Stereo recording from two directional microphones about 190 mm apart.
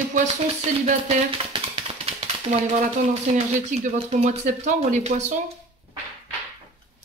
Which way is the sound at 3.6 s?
35° right (ahead or behind).